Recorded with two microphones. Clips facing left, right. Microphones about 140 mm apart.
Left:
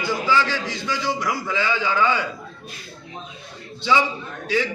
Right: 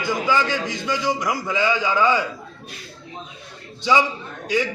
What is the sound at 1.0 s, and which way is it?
A man's voice, 15° right (ahead or behind).